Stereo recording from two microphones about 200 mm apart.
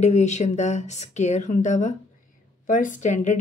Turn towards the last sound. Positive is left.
turn(degrees=35)  # may be behind; listen again after turning